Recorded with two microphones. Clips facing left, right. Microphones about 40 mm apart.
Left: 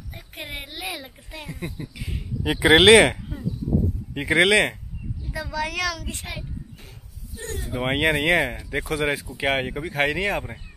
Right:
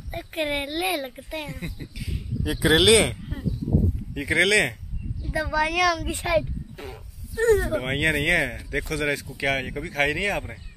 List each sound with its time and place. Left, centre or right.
0.1 s speech: right
1.1 s a woman's voice: centre
1.7 s speech: centre
2.4 s speech: left
4.1 s speech: left
5.2 s a woman's voice: centre
6.3 s a sound: right
7.3 s speech: right
7.8 s speech: centre